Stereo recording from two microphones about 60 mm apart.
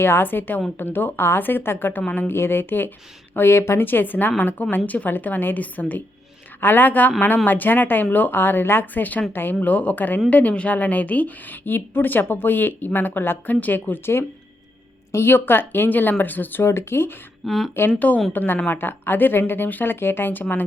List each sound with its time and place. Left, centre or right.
0.0 s a woman's voice: left
17.4 s speech: centre
17.7 s a woman's voice: left